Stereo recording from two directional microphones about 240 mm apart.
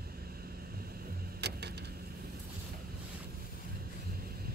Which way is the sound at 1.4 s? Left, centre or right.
Right.